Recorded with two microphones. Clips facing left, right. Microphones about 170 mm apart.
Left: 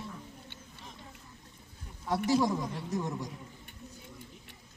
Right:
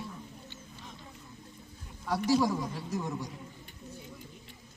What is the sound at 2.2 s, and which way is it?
Speech, centre (ahead or behind).